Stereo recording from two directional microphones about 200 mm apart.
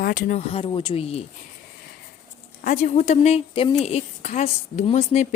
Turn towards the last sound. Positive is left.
turn(degrees=35)  # may be behind; listen again after turning